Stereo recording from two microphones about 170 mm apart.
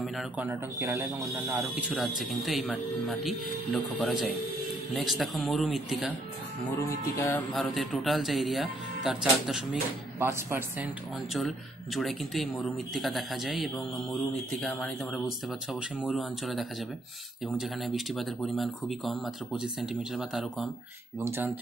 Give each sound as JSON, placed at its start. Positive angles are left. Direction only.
{"t": 0.0, "sound": "speech", "side_deg": 0}
{"t": 0.5, "sound": "speech", "side_deg": -10}
{"t": 6.9, "sound": "music", "side_deg": 15}
{"t": 7.5, "sound": "speech", "side_deg": 0}
{"t": 11.3, "sound": "speech", "side_deg": 0}
{"t": 21.2, "sound": "speech", "side_deg": -15}